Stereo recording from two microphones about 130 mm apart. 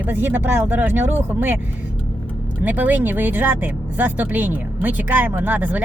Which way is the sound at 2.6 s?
15° right (ahead or behind).